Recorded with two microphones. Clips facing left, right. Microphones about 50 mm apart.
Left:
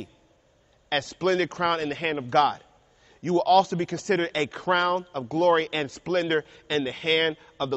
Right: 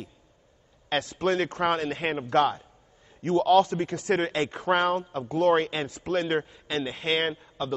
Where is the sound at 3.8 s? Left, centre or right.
Centre.